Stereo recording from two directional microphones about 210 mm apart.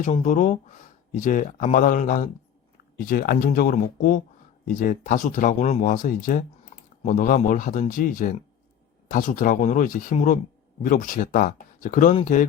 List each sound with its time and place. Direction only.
0.0 s speech: 35° left (ahead or behind)